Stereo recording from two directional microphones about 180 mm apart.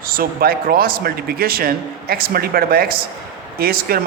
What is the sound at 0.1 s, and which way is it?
A man's voice, 55° right (ahead or behind).